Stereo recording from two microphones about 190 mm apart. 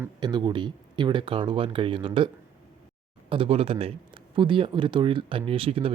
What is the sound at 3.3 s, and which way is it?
Speech, 30° right (ahead or behind).